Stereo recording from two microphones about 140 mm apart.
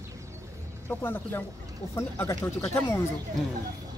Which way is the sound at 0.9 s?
15° left (ahead or behind).